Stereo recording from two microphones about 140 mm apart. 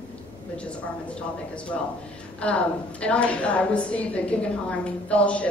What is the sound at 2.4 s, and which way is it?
A woman's voice, 10° left (ahead or behind).